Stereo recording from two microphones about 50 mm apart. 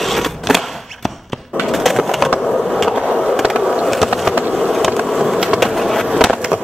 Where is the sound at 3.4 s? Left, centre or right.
Centre.